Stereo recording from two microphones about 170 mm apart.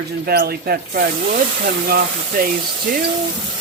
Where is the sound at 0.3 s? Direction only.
65° right (ahead or behind).